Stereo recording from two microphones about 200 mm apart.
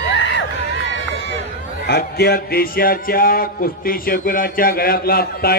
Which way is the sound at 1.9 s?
50° left (ahead or behind).